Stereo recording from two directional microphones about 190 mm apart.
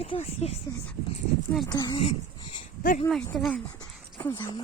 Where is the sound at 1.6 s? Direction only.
20° left (ahead or behind).